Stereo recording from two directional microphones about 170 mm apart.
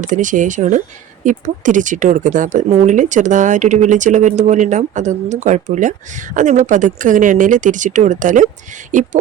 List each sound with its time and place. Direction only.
0.0 s a woman's voice: 45° right (ahead or behind)